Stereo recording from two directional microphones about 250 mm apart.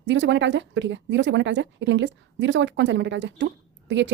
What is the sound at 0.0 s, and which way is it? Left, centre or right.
A woman's voice, right.